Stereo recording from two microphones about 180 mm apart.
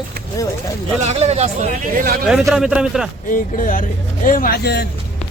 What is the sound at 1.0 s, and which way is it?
Speech, 40° right (ahead or behind).